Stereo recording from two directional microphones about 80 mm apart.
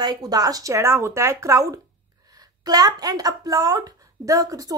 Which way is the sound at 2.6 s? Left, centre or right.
Right.